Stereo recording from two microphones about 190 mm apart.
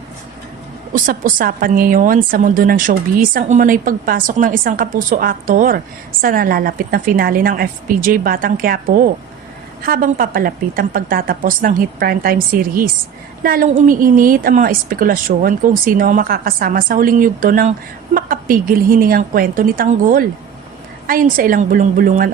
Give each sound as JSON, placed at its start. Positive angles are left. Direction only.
{"t": 0.9, "sound": "a woman's voice", "side_deg": -45}
{"t": 9.8, "sound": "a woman's voice", "side_deg": -50}